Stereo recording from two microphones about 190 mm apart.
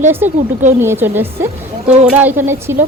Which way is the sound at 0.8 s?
10° right (ahead or behind).